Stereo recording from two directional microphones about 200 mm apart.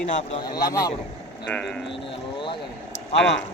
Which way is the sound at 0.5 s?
20° left (ahead or behind).